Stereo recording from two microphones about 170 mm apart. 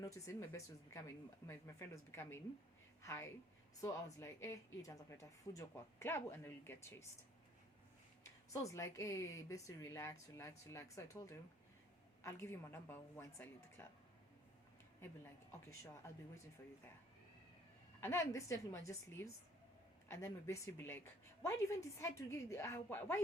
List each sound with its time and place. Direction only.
0.0 s speech: 15° left (ahead or behind)
8.2 s speech: 20° left (ahead or behind)
15.8 s speech: 15° left (ahead or behind)
18.0 s speech: 15° left (ahead or behind)